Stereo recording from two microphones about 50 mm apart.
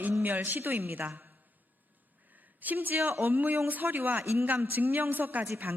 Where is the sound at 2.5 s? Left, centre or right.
Right.